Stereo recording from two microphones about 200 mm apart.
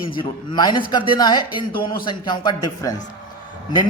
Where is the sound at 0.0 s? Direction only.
25° left (ahead or behind).